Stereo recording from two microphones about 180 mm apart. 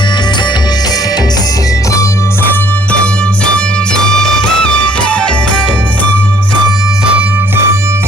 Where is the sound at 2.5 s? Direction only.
5° left (ahead or behind).